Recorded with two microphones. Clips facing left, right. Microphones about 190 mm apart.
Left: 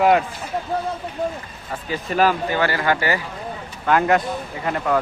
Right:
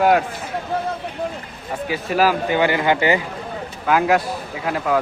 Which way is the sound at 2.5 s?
20° right (ahead or behind).